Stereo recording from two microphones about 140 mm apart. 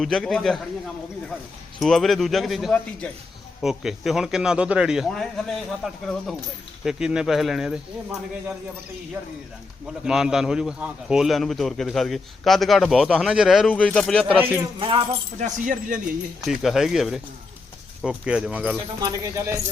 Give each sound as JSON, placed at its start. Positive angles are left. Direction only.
{"t": 0.0, "sound": "a man's voice", "side_deg": 0}
{"t": 1.8, "sound": "a man's voice", "side_deg": 0}
{"t": 9.8, "sound": "a man's voice", "side_deg": -5}
{"t": 13.7, "sound": "speech", "side_deg": 10}
{"t": 14.3, "sound": "speech", "side_deg": -15}
{"t": 14.8, "sound": "speech", "side_deg": -40}
{"t": 15.4, "sound": "speech", "side_deg": -70}
{"t": 16.5, "sound": "a man's voice", "side_deg": 0}
{"t": 19.0, "sound": "speech", "side_deg": -20}